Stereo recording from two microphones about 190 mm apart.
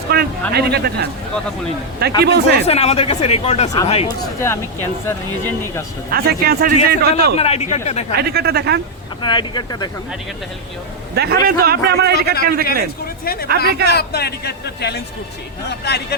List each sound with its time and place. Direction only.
0.1 s a sound: 55° right (ahead or behind)
0.5 s speech: 60° right (ahead or behind)
2.6 s speech: 35° left (ahead or behind)
4.4 s speech: 15° left (ahead or behind)
6.1 s speech: 55° right (ahead or behind)
7.3 s speech: 35° left (ahead or behind)
8.1 s speech: 55° right (ahead or behind)
9.2 s speech: 25° left (ahead or behind)
11.1 s a man's voice: 60° right (ahead or behind)
13.2 s speech: 55° left (ahead or behind)
13.7 s speech: 55° right (ahead or behind)
13.9 s speech: 55° left (ahead or behind)